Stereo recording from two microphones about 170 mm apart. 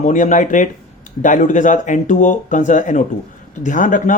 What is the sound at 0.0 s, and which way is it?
Speech, 45° left (ahead or behind).